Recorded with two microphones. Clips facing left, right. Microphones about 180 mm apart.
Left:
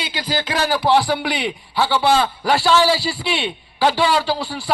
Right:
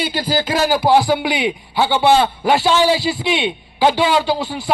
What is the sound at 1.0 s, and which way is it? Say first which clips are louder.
A man's voice: right 4 dB; 20° right (ahead or behind).